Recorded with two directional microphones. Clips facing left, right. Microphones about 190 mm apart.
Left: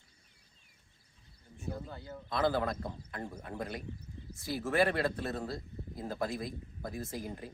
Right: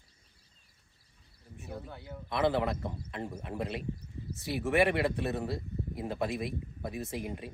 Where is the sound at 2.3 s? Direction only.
20° right (ahead or behind).